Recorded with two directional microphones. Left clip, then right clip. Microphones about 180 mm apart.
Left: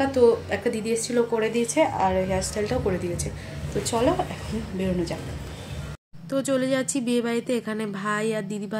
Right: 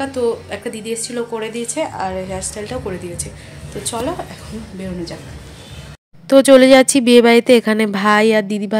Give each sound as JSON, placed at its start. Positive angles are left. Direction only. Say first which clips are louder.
{"t": 0.0, "sound": "speech", "louder": "even", "side_deg": -5}
{"t": 6.2, "sound": "speech", "louder": "right 17 dB", "side_deg": -50}